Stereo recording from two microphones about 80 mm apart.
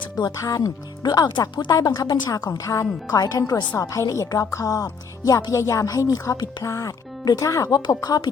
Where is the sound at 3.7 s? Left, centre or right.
Left.